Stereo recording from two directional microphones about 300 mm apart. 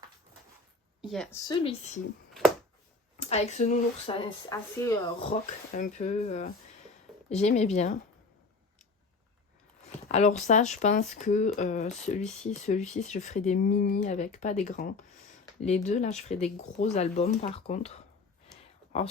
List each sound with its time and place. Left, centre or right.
1.0 s a woman's voice: centre
1.5 s speech: centre
3.2 s speech: left
5.3 s speech: left
9.8 s speech: left